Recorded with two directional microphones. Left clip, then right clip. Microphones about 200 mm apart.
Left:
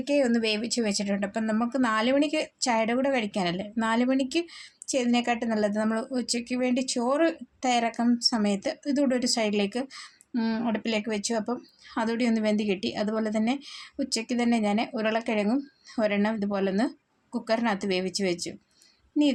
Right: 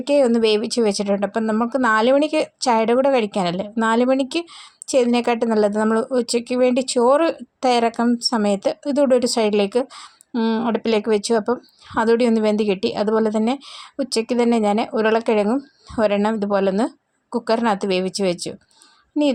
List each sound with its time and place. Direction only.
0.0 s speech: 35° right (ahead or behind)